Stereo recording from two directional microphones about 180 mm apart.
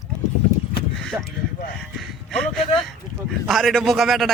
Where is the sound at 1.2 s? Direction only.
10° right (ahead or behind).